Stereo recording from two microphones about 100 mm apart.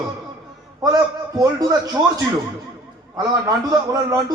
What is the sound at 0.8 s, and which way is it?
Speech, 35° right (ahead or behind).